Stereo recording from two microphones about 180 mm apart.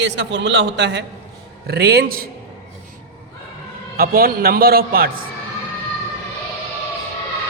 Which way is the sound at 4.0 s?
55° right (ahead or behind).